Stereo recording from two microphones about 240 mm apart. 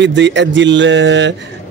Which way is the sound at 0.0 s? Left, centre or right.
Right.